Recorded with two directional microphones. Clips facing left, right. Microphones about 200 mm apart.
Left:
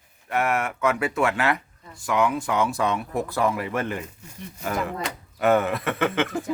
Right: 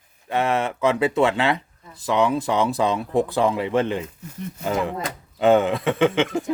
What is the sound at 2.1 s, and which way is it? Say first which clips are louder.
Speech: right 3 dB; 30° right (ahead or behind).